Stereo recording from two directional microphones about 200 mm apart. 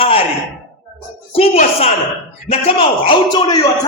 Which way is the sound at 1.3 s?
30° left (ahead or behind).